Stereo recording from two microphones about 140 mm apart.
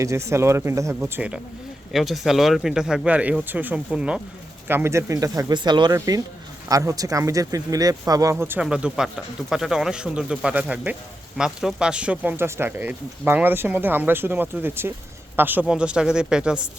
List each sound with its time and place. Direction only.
0.0 s speech: 20° right (ahead or behind)
1.9 s speech: centre (ahead or behind)
4.7 s speech: 20° right (ahead or behind)